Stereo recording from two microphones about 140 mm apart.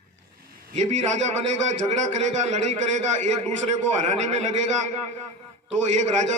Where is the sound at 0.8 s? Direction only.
55° right (ahead or behind).